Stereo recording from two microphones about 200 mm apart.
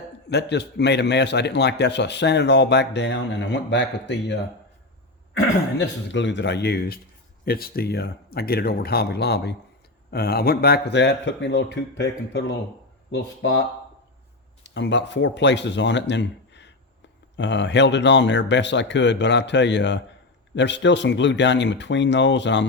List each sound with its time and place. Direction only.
0.3 s a man's voice: 55° left (ahead or behind)
5.8 s a man's voice: 65° left (ahead or behind)
14.6 s a man's voice: 60° left (ahead or behind)